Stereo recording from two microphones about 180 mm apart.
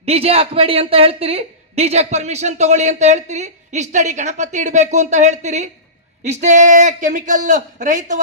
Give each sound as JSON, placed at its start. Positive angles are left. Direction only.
{"t": 0.0, "sound": "a man's voice", "side_deg": -35}